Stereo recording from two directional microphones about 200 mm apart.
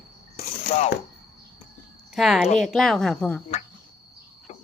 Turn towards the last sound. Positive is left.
turn(degrees=5)  # may be behind; listen again after turning